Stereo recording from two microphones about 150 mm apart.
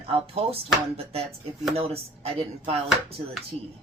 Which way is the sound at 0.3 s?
40° right (ahead or behind).